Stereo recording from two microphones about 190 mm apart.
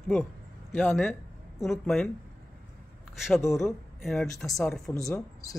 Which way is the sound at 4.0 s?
Centre (ahead or behind).